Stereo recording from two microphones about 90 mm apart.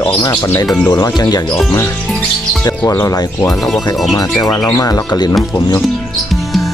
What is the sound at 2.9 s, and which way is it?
Speech, 40° left (ahead or behind).